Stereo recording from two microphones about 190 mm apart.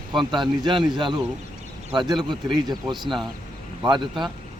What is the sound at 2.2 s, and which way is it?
Speech, 20° right (ahead or behind).